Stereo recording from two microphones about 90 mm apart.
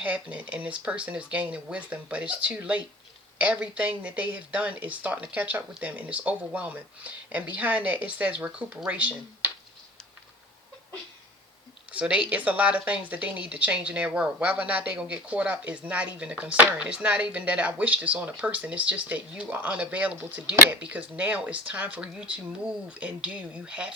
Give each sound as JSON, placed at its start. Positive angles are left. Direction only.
{"t": 0.0, "sound": "speech", "side_deg": -15}
{"t": 11.9, "sound": "speech", "side_deg": -15}